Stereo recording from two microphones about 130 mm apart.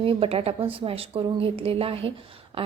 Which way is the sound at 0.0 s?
45° right (ahead or behind).